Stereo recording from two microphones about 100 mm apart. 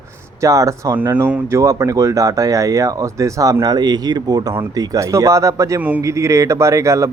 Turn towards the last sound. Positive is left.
turn(degrees=-30)  # may be behind; listen again after turning